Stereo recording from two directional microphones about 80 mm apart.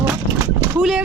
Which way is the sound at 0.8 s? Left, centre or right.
Centre.